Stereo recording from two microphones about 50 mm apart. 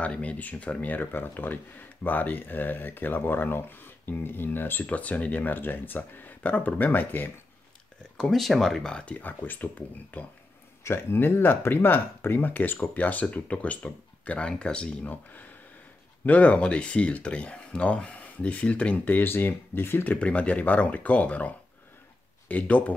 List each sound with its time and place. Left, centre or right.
0.0 s speech: left
0.9 s speech: left
4.8 s speech: left
8.3 s speech: centre
9.0 s speech: left
10.8 s speech: left
14.5 s speech: centre
16.3 s speech: left
19.1 s speech: left
20.1 s speech: left